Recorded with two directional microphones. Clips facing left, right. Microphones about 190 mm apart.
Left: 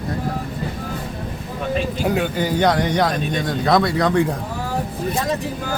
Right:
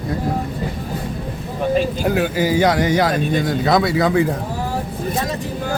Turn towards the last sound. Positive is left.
turn(degrees=-5)  # may be behind; listen again after turning